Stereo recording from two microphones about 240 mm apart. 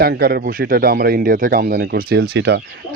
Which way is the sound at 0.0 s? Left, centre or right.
Right.